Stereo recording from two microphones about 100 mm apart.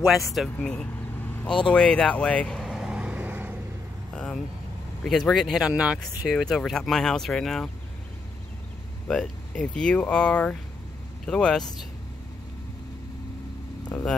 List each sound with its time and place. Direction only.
0.6 s vehicle: 10° left (ahead or behind)
1.5 s speech: 10° left (ahead or behind)
2.6 s vehicle: 5° right (ahead or behind)
4.1 s vehicle: 10° left (ahead or behind)
5.0 s speech: centre (ahead or behind)
6.3 s speech: 5° left (ahead or behind)
9.0 s speech: 10° left (ahead or behind)
13.8 s vehicle: 10° left (ahead or behind)